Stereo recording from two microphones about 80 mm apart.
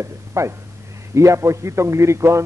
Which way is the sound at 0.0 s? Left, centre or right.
Right.